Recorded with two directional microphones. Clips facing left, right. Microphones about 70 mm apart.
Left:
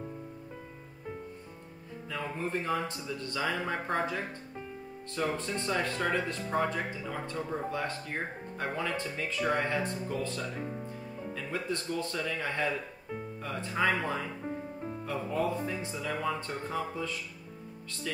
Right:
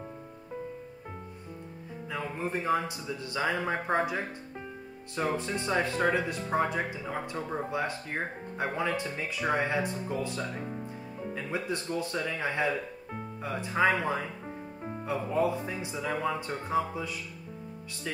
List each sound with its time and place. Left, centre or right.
2.3 s speech: centre